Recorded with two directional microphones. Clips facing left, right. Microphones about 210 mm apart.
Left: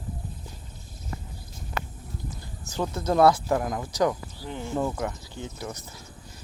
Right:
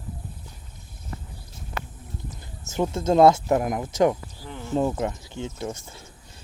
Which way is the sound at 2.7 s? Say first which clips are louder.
Right 4 dB; 25° right (ahead or behind).